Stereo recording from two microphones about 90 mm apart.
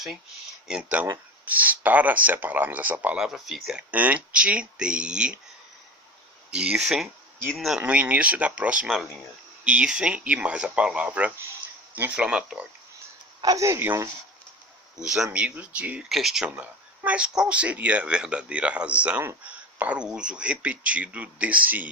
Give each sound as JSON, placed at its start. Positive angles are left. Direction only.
{"t": 0.7, "sound": "speech", "side_deg": -15}
{"t": 3.2, "sound": "speech", "side_deg": -5}
{"t": 3.8, "sound": "speech", "side_deg": -15}
{"t": 6.5, "sound": "speech", "side_deg": -10}
{"t": 7.4, "sound": "speech", "side_deg": 5}
{"t": 7.8, "sound": "speech", "side_deg": -15}
{"t": 13.4, "sound": "speech", "side_deg": -40}
{"t": 13.7, "sound": "speech", "side_deg": -30}
{"t": 15.0, "sound": "speech", "side_deg": -5}
{"t": 16.0, "sound": "speech", "side_deg": 0}
{"t": 16.5, "sound": "speech", "side_deg": -15}